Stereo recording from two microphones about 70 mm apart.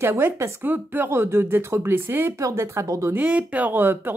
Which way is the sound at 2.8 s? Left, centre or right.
Right.